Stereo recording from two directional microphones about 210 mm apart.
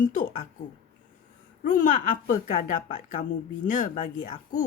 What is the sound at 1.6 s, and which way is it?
A woman's voice, 40° left (ahead or behind).